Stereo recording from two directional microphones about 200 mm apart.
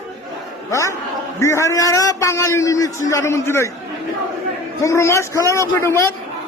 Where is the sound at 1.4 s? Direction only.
15° left (ahead or behind).